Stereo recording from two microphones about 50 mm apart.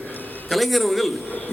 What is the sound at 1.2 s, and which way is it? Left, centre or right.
Speech, left.